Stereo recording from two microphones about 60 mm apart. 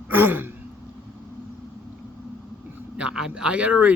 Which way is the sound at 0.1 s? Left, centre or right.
Right.